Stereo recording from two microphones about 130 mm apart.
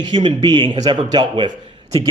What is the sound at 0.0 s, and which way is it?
A man's voice, 35° right (ahead or behind).